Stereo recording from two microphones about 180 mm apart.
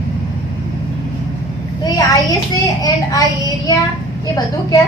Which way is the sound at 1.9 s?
20° left (ahead or behind).